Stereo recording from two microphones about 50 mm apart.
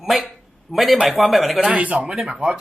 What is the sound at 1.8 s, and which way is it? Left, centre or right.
Speech, right.